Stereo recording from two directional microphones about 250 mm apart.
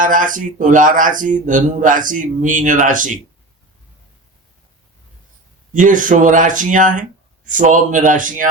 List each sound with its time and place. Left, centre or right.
0.0 s speech: right
5.7 s speech: right